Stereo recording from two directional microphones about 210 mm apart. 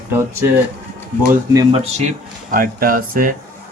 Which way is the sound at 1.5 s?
30° right (ahead or behind).